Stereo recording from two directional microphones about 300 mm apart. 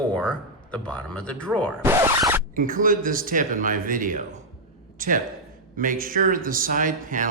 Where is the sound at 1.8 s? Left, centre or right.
Centre.